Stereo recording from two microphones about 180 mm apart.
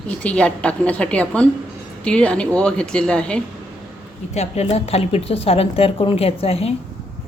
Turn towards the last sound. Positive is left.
turn(degrees=35)  # may be behind; listen again after turning